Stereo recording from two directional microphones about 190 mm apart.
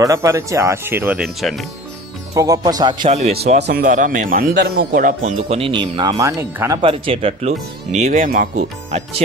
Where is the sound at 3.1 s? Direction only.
35° right (ahead or behind).